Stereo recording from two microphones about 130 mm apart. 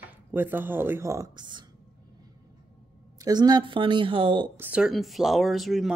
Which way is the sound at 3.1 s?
30° right (ahead or behind).